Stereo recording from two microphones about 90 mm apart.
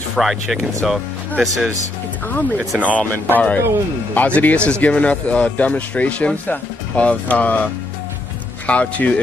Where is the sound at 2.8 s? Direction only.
15° left (ahead or behind).